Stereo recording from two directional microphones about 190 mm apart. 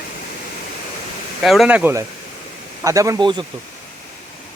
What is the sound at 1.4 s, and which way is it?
Speech, centre (ahead or behind).